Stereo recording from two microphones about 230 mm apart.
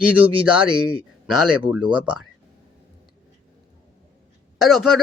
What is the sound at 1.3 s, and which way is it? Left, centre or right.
Speech, centre.